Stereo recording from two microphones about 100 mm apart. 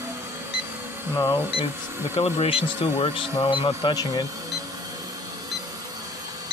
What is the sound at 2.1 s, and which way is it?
Speech, 90° left.